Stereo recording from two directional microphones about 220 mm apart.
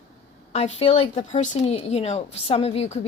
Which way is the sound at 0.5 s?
30° left (ahead or behind).